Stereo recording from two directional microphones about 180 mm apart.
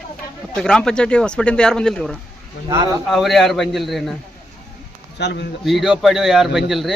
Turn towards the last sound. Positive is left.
turn(degrees=0)  # may be behind; listen again after turning